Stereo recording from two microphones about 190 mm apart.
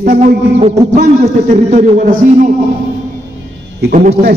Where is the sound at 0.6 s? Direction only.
35° right (ahead or behind).